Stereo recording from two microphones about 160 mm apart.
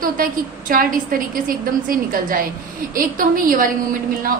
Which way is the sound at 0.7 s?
65° right (ahead or behind).